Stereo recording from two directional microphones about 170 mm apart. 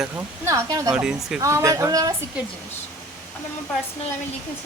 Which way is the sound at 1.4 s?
20° right (ahead or behind).